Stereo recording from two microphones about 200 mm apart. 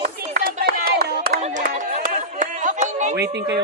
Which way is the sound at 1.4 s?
35° right (ahead or behind).